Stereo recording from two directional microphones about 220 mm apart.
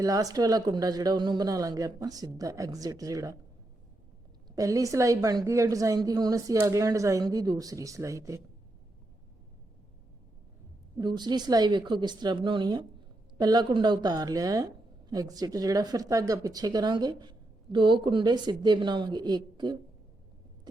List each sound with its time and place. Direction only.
0.0 s a woman's voice: 15° right (ahead or behind)
4.4 s a woman's voice: 15° right (ahead or behind)
10.9 s a woman's voice: 20° right (ahead or behind)